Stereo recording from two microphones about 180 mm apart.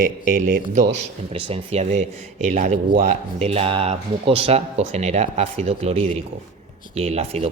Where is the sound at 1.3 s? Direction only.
30° right (ahead or behind).